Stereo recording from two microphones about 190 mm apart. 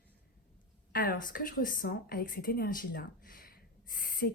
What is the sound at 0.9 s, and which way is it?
A woman's voice, 50° left (ahead or behind).